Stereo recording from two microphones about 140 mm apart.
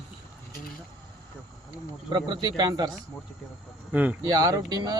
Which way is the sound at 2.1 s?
30° right (ahead or behind).